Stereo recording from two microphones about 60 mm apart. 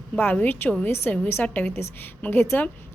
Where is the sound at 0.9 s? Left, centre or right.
Left.